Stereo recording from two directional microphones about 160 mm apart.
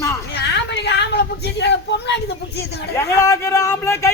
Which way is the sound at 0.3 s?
90° left.